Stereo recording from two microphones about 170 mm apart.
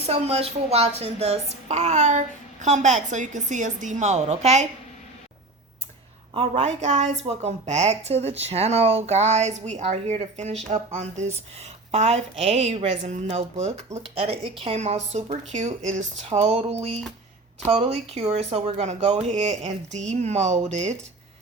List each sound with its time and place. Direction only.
0.0 s a woman's voice: 35° right (ahead or behind)
6.3 s a woman's voice: 35° right (ahead or behind)